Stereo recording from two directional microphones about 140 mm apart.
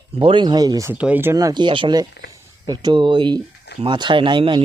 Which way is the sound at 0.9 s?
10° right (ahead or behind).